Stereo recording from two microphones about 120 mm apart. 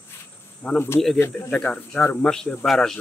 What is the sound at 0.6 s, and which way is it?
Speech, 10° left (ahead or behind).